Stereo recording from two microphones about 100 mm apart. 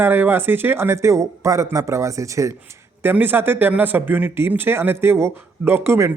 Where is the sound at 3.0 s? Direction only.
20° right (ahead or behind).